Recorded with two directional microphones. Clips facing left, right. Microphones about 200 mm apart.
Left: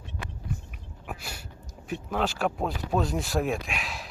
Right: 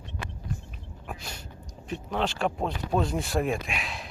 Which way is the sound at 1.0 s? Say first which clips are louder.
Left 1 dB; 10° left (ahead or behind).